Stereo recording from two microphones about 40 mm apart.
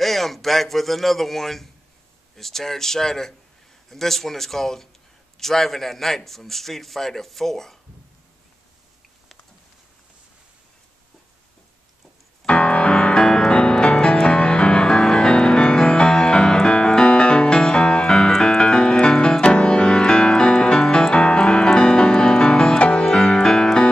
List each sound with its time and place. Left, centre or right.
0.0 s a man's voice: centre
12.4 s music: left
18.4 s keyboard: centre
19.4 s music: left